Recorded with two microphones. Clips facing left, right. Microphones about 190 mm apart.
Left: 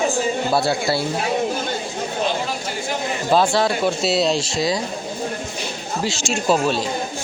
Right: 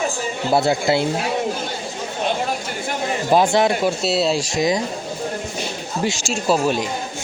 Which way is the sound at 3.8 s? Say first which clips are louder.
Even; centre (ahead or behind).